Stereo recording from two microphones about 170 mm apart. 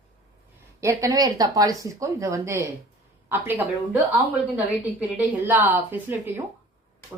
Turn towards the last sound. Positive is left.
turn(degrees=-15)  # may be behind; listen again after turning